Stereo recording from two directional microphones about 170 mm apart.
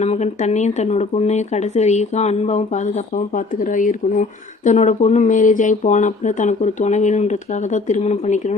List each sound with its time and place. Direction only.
0.0 s speech: 40° left (ahead or behind)